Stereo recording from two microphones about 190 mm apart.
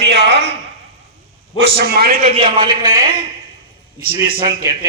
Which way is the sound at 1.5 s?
60° right (ahead or behind).